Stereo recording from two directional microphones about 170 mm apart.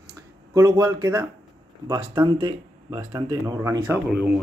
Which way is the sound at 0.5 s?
20° right (ahead or behind).